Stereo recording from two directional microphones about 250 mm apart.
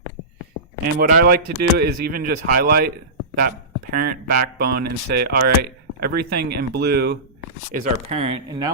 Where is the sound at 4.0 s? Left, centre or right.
Right.